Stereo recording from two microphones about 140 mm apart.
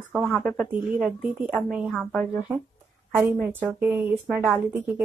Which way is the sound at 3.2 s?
15° right (ahead or behind).